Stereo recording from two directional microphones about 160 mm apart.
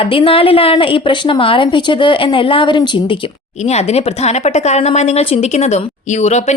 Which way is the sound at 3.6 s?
45° left (ahead or behind).